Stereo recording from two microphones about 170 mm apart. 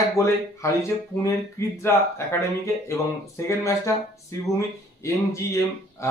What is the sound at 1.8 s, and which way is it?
Speech, 15° left (ahead or behind).